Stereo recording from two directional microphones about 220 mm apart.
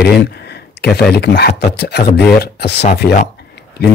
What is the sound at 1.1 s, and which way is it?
Speech, 45° left (ahead or behind).